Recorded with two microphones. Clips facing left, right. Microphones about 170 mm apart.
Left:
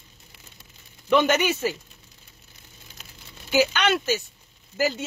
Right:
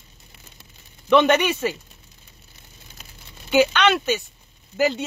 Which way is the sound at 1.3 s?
Centre (ahead or behind).